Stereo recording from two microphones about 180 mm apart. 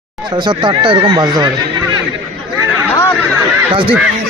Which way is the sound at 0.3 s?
25° right (ahead or behind).